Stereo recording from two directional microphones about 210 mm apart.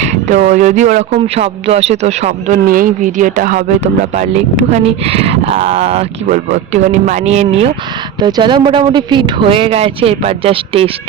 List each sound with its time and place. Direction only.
0.0 s speech: 35° right (ahead or behind)